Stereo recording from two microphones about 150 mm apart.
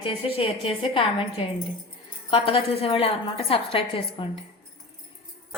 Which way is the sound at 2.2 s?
35° left (ahead or behind).